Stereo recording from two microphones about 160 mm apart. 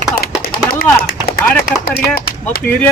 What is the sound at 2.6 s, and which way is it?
Speech, 10° left (ahead or behind).